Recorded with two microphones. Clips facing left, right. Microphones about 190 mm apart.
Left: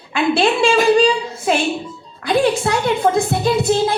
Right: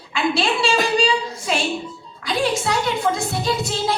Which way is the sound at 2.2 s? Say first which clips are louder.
Left 5 dB; 55° left (ahead or behind).